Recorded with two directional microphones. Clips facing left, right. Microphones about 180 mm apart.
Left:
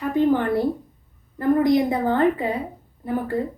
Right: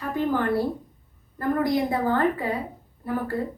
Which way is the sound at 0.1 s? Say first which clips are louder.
Left 4 dB; 20° left (ahead or behind).